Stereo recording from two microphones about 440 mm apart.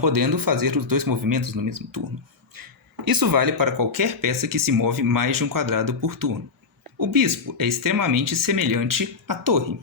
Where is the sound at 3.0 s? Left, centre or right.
Right.